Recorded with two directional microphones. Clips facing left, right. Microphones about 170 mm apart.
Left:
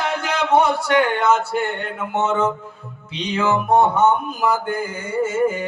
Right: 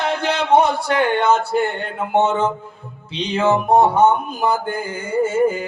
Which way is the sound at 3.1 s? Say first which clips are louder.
Right 3 dB; 30° right (ahead or behind).